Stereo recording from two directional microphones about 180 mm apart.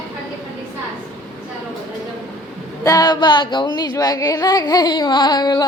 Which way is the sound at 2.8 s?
20° left (ahead or behind).